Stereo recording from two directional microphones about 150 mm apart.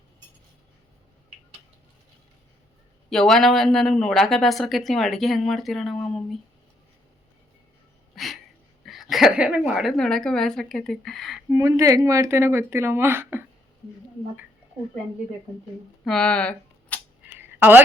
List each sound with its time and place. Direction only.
3.1 s speech: 5° left (ahead or behind)
8.1 s a sound: centre (ahead or behind)
8.8 s speech: centre (ahead or behind)
11.5 s a woman's voice: 20° right (ahead or behind)
16.0 s speech: 5° left (ahead or behind)
17.3 s a sound: 15° right (ahead or behind)